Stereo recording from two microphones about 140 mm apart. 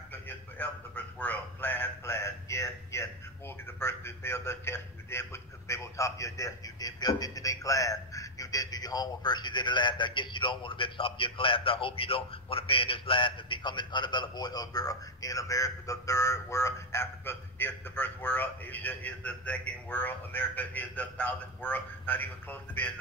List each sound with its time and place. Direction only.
0.1 s a man's voice: 15° left (ahead or behind)